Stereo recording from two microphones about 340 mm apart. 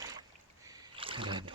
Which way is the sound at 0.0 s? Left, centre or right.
Centre.